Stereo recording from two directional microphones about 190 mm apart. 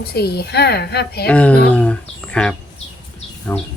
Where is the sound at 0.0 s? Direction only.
55° left (ahead or behind).